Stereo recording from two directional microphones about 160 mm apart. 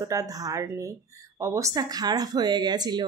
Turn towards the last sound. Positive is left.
turn(degrees=-25)  # may be behind; listen again after turning